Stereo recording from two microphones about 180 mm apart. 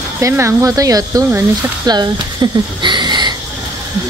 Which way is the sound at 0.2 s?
15° right (ahead or behind).